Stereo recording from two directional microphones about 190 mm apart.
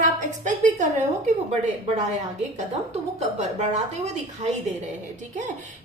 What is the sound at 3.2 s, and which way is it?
Speech, 35° right (ahead or behind).